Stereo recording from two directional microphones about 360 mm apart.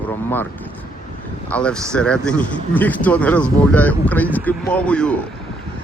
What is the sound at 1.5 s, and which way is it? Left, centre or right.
Speech, centre.